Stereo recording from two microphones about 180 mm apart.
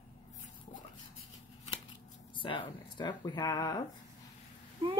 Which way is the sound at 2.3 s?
30° left (ahead or behind).